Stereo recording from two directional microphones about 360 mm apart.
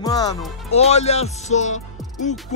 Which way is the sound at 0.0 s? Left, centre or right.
Centre.